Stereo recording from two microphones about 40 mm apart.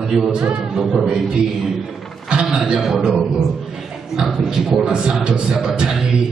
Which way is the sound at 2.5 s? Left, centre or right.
Centre.